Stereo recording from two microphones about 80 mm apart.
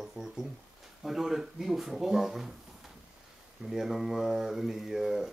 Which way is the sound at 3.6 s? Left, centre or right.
Centre.